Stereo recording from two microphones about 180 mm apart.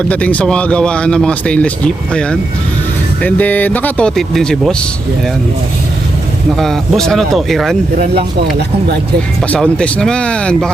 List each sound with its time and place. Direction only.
0.1 s speech: 10° left (ahead or behind)
6.6 s speech: centre (ahead or behind)
8.1 s speech: 65° right (ahead or behind)
9.5 s speech: 5° left (ahead or behind)